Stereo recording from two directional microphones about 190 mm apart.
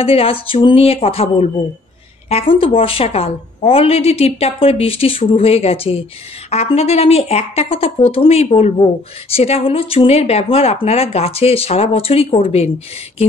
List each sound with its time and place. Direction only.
0.0 s a woman's voice: 30° left (ahead or behind)